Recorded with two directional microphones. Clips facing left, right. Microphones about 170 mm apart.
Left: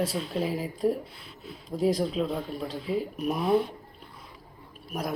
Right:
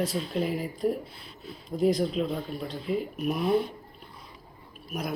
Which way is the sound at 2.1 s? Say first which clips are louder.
Even; centre (ahead or behind).